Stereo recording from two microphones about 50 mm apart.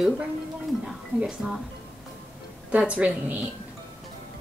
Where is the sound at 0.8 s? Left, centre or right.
Centre.